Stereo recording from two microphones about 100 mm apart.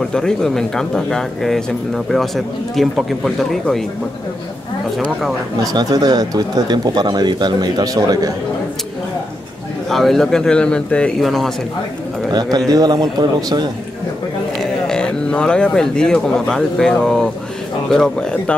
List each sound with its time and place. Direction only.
0.1 s speech: 5° left (ahead or behind)
5.6 s speech: 40° right (ahead or behind)
9.8 s speech: centre (ahead or behind)
12.3 s speech: 45° right (ahead or behind)
14.6 s speech: 5° left (ahead or behind)